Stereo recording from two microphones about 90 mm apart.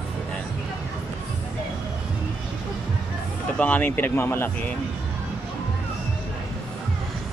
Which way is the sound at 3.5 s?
20° left (ahead or behind).